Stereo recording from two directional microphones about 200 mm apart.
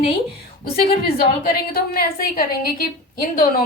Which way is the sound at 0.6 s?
50° left (ahead or behind).